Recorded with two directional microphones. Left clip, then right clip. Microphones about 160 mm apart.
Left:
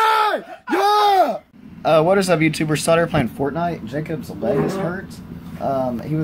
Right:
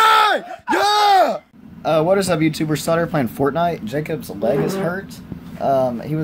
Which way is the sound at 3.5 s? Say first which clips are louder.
Right 4 dB; 45° right (ahead or behind).